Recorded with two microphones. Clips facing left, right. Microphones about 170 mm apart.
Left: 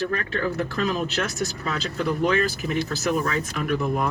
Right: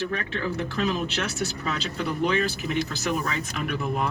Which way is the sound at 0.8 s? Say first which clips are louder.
Even; 45° left (ahead or behind).